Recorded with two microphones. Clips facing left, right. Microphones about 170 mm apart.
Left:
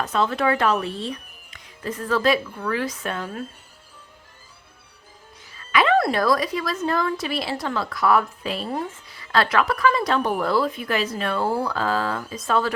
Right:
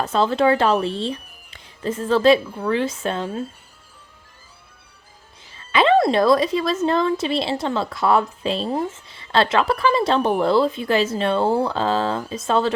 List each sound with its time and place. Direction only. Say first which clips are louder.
0.0 s a woman's voice: right 4 dB; 30° right (ahead or behind)
5.5 s a woman's voice: right 3 dB; 25° right (ahead or behind)